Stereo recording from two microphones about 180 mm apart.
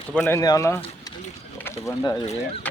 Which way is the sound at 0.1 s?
5° left (ahead or behind).